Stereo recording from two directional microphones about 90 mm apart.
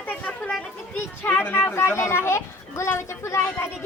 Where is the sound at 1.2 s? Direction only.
25° left (ahead or behind).